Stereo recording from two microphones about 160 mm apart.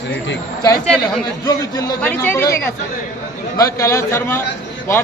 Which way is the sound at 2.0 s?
10° left (ahead or behind).